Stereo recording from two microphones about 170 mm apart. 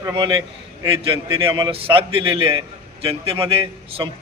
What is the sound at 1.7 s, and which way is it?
A man's voice, 35° right (ahead or behind).